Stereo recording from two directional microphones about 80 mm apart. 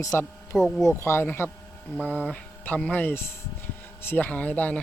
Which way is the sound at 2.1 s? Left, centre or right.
Right.